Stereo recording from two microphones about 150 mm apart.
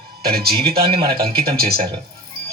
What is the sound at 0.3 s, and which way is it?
Speech, 90° right.